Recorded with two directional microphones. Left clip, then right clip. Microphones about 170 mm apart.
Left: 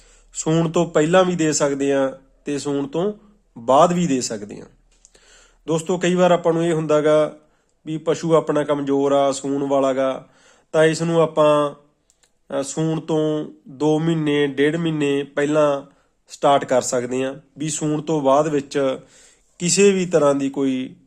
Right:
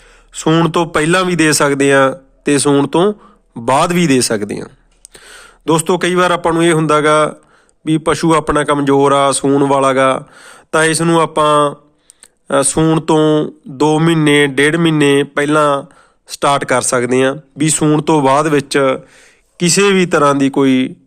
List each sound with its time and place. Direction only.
0.3 s a man's voice: 15° right (ahead or behind)